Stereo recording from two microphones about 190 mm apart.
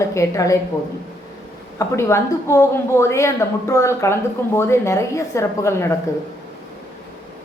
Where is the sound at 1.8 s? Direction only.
15° left (ahead or behind).